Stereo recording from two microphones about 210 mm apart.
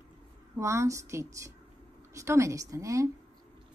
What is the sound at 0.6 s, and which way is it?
A woman's voice, 15° right (ahead or behind).